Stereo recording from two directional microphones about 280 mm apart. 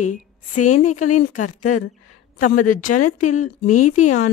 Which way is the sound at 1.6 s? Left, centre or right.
Left.